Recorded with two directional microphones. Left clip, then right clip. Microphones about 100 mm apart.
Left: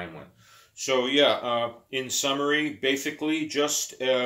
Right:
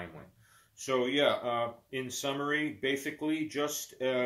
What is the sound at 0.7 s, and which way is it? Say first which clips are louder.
Speech: left 7 dB; 10° left (ahead or behind).